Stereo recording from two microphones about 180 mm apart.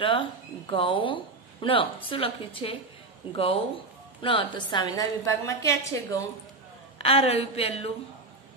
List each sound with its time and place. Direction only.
0.0 s a woman's voice: 30° left (ahead or behind)
4.2 s a woman's voice: 25° left (ahead or behind)
7.0 s a woman's voice: 35° left (ahead or behind)